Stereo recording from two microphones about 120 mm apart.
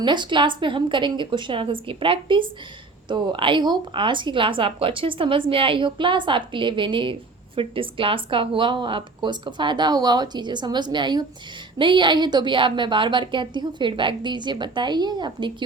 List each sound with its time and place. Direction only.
0.0 s a woman's voice: 40° right (ahead or behind)